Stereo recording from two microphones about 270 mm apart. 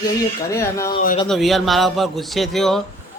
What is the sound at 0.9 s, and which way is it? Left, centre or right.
Speech, left.